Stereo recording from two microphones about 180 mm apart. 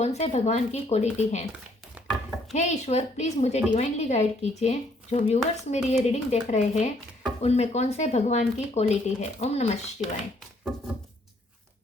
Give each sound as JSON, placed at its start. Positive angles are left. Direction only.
{"t": 0.0, "sound": "speech", "side_deg": 35}
{"t": 2.0, "sound": "chopping", "side_deg": -10}
{"t": 2.5, "sound": "speech", "side_deg": 40}